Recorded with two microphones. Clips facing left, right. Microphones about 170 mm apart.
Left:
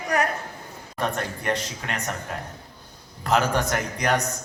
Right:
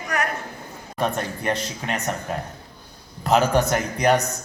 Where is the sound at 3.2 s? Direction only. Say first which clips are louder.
Right 4 dB; 20° right (ahead or behind).